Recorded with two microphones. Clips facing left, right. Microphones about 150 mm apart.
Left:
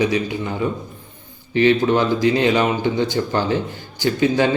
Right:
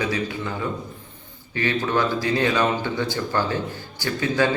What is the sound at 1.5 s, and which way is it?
A man's voice, 20° left (ahead or behind).